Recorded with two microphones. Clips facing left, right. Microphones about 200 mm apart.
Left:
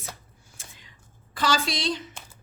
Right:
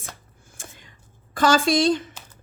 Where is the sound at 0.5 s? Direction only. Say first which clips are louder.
Right 7 dB; 50° right (ahead or behind).